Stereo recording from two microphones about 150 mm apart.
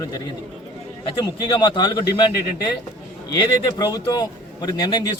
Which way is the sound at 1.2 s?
30° left (ahead or behind).